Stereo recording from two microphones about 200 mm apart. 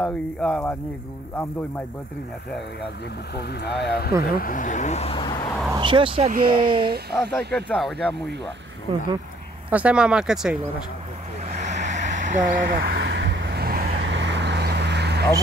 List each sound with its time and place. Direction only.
0.0 s speech: centre (ahead or behind)
3.3 s speech: 55° left (ahead or behind); by 5.5 s 25° left (ahead or behind)
5.7 s speech: 25° right (ahead or behind)
6.3 s speech: 45° right (ahead or behind)
7.3 s speech: centre (ahead or behind)
9.7 s speech: 5° right (ahead or behind)
12.3 s vehicle: 45° right (ahead or behind)